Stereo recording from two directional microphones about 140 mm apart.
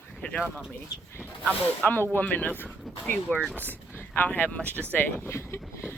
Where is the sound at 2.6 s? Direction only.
5° right (ahead or behind).